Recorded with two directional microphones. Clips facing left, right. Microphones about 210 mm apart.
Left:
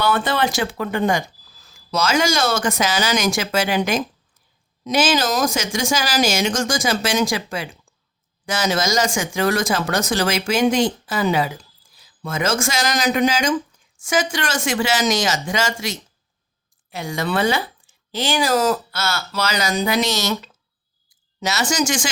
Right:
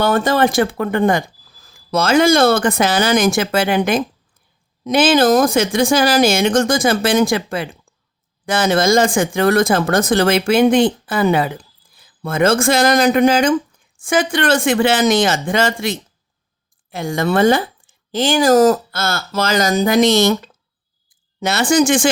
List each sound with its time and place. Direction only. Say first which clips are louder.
0.0 s speech: right 5 dB; 45° right (ahead or behind)